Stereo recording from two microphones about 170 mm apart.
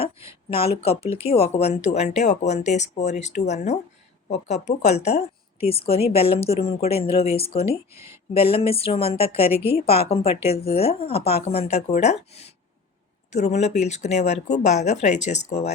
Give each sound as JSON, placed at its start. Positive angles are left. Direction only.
{"t": 0.8, "sound": "a woman's voice", "side_deg": 35}
{"t": 7.9, "sound": "speech", "side_deg": -15}
{"t": 8.3, "sound": "a woman's voice", "side_deg": 35}